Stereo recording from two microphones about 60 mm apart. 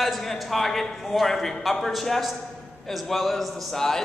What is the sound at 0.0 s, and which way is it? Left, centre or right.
A man's voice, centre.